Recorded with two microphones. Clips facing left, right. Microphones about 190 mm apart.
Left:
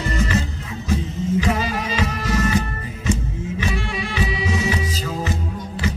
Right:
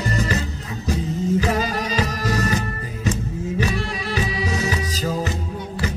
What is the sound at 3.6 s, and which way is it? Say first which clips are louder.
Music: even; 40° right (ahead or behind).